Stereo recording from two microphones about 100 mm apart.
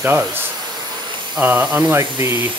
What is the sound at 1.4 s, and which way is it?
Speech, 15° right (ahead or behind).